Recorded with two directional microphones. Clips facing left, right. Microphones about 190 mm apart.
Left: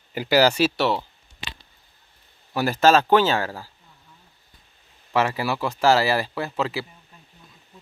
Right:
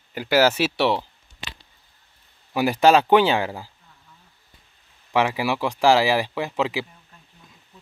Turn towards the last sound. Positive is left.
turn(degrees=-15)  # may be behind; listen again after turning